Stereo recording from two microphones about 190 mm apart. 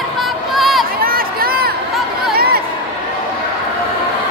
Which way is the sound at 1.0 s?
50° right (ahead or behind).